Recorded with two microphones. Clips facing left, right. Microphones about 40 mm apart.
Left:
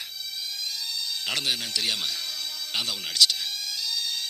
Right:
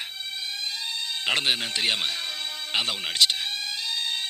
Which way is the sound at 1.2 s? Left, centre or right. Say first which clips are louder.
Right 5 dB; right.